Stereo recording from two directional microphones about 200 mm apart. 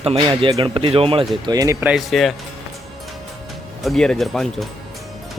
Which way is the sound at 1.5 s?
15° right (ahead or behind).